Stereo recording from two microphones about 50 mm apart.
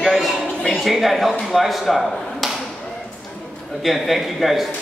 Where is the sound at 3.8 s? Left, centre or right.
Centre.